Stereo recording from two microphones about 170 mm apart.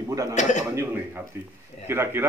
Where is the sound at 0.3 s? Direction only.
45° left (ahead or behind).